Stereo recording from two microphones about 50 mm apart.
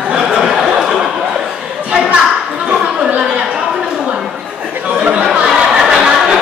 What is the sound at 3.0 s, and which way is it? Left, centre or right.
Chatter, centre.